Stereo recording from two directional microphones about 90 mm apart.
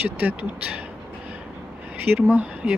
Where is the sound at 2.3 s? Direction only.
15° right (ahead or behind).